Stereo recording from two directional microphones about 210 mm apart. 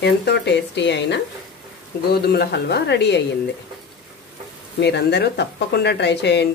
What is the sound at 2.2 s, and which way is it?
Speech, 50° left (ahead or behind).